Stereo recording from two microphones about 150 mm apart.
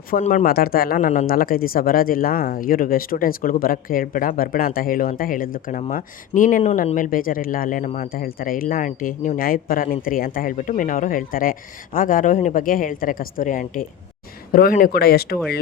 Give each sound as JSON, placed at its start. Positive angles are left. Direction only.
{"t": 0.2, "sound": "speech", "side_deg": 55}
{"t": 0.4, "sound": "speech", "side_deg": 85}
{"t": 14.5, "sound": "speech", "side_deg": 75}